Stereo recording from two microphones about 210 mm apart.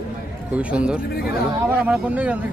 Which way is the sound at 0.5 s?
5° right (ahead or behind).